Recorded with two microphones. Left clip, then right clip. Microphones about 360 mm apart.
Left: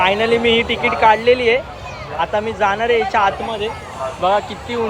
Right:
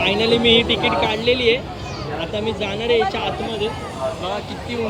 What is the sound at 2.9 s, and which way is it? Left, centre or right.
Speech, centre.